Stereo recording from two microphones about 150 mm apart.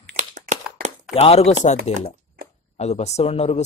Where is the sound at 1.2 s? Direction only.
45° left (ahead or behind).